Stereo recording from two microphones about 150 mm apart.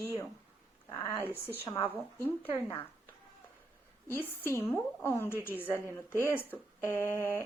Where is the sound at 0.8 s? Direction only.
20° left (ahead or behind).